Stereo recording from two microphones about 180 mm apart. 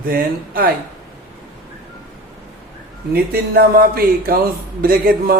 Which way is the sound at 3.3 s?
55° right (ahead or behind).